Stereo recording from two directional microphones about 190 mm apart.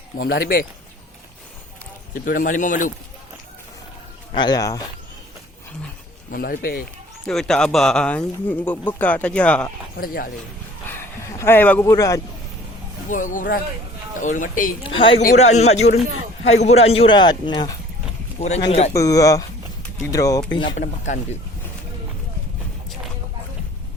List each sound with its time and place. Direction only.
0.2 s speech: 50° left (ahead or behind)
2.1 s speech: 45° left (ahead or behind)
4.4 s speech: 20° left (ahead or behind)
6.3 s speech: 50° left (ahead or behind)
7.3 s speech: centre (ahead or behind)
10.0 s speech: 50° left (ahead or behind)
10.8 s speech: 15° left (ahead or behind)
13.1 s speech: 45° left (ahead or behind)
14.8 s speech: 30° left (ahead or behind)
15.2 s a man's voice: 40° left (ahead or behind); by 17.7 s 25° left (ahead or behind)
18.4 s a man's voice: 35° left (ahead or behind)
18.9 s speech: 20° left (ahead or behind)
20.7 s speech: 40° left (ahead or behind)